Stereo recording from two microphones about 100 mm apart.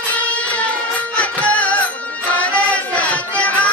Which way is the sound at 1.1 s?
15° left (ahead or behind).